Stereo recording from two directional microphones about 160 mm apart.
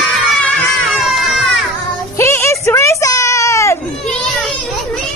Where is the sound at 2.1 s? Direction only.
15° left (ahead or behind).